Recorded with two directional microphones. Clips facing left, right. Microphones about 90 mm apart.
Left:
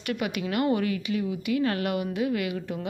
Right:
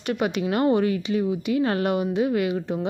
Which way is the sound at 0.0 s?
30° right (ahead or behind).